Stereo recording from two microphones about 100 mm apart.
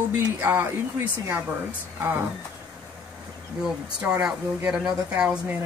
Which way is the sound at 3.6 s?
10° right (ahead or behind).